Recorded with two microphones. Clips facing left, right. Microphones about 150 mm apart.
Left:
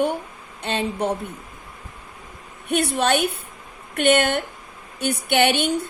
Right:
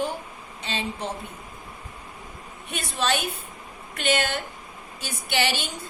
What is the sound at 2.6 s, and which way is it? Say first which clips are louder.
A woman's voice: left 7 dB; 60° left (ahead or behind).